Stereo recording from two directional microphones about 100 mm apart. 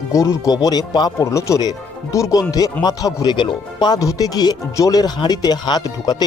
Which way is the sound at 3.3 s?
50° left (ahead or behind).